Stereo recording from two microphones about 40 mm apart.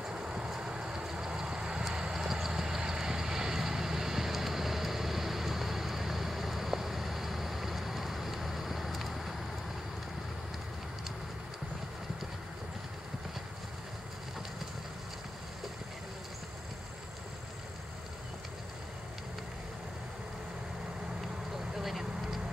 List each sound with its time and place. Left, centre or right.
0.1 s vehicle: right; by 9.3 s centre
21.7 s vehicle: centre